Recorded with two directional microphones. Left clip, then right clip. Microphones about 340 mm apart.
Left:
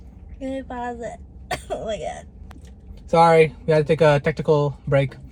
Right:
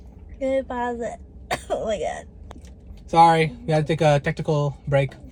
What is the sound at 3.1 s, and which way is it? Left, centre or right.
Speech, centre.